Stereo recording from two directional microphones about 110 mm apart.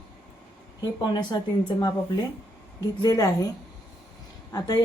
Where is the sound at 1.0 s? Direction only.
40° left (ahead or behind).